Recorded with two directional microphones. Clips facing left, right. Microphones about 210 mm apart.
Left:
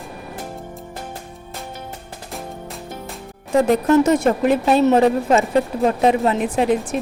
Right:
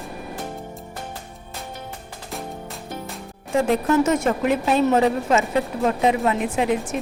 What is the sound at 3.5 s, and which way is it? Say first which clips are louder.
A woman's voice: left 4 dB; 35° left (ahead or behind).